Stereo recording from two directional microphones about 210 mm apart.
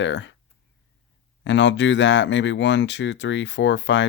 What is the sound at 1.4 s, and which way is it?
Speech, 60° left (ahead or behind).